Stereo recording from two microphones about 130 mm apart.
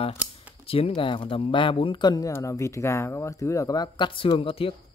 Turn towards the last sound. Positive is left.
turn(degrees=45)  # may be behind; listen again after turning